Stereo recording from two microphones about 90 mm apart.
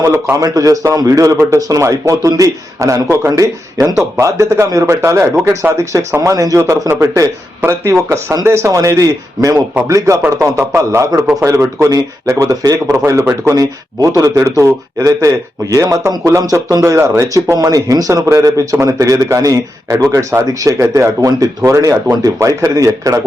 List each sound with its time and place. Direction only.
0.0 s a man's voice: 30° right (ahead or behind)
6.6 s a man's voice: 30° right (ahead or behind)